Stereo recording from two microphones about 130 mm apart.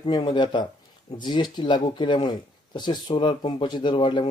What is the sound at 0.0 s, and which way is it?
Speech, 40° left (ahead or behind).